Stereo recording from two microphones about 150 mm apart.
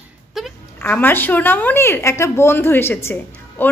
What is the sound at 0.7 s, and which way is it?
A woman's voice, 10° left (ahead or behind).